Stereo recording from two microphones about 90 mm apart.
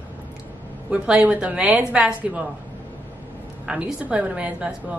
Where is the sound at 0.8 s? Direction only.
10° right (ahead or behind).